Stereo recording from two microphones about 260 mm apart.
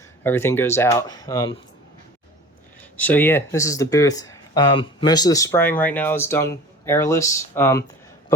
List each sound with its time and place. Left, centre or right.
0.2 s speech: centre
3.0 s speech: centre